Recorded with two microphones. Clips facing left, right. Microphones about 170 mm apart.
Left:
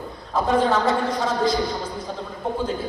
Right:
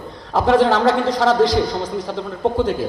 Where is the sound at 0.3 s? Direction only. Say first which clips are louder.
Right 5 dB; 85° right.